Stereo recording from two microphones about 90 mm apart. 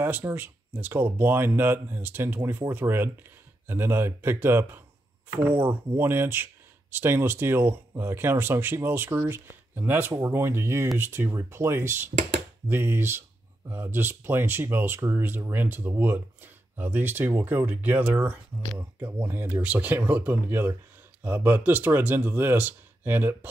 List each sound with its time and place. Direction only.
0.0 s speech: 25° right (ahead or behind)